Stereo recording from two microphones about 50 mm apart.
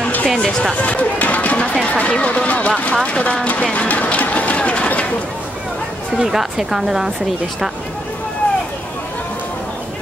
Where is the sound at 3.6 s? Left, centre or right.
Left.